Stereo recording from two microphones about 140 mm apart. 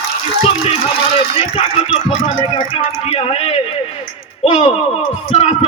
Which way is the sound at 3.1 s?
45° left (ahead or behind).